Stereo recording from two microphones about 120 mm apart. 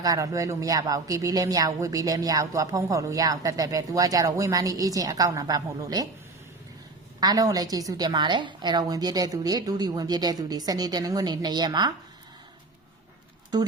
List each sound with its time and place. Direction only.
0.0 s speech: 30° right (ahead or behind)
7.2 s a woman's voice: 30° right (ahead or behind)